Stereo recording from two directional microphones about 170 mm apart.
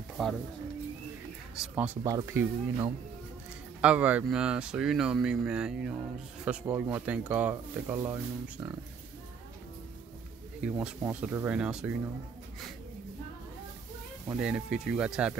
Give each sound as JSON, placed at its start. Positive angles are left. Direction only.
{"t": 0.2, "sound": "speech", "side_deg": 0}
{"t": 1.6, "sound": "speech", "side_deg": -10}
{"t": 10.6, "sound": "speech", "side_deg": -5}
{"t": 14.3, "sound": "speech", "side_deg": -5}